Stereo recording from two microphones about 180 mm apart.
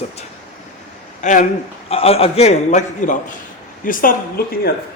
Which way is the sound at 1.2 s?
45° left (ahead or behind).